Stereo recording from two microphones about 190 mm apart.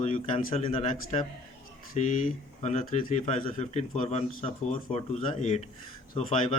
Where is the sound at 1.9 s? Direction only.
40° left (ahead or behind).